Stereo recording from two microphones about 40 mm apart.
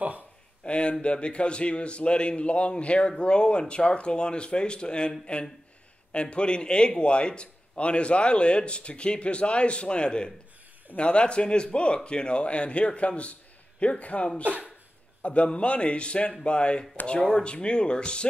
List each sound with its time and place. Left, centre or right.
0.7 s a man's voice: left